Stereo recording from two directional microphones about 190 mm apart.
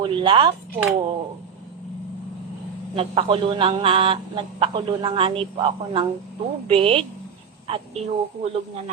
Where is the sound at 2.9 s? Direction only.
30° right (ahead or behind).